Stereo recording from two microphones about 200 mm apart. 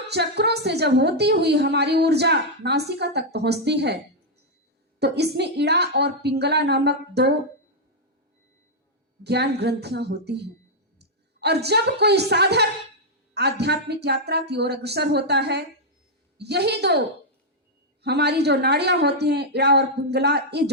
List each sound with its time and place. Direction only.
0.1 s a woman's voice: 55° right (ahead or behind)
4.9 s a woman's voice: 55° right (ahead or behind)
9.2 s a woman's voice: 55° right (ahead or behind)
18.0 s a woman's voice: 55° right (ahead or behind)